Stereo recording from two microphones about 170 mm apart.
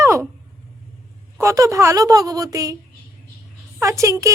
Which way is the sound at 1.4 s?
20° right (ahead or behind).